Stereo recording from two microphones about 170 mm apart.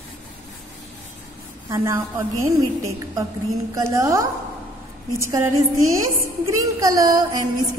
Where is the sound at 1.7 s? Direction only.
20° right (ahead or behind).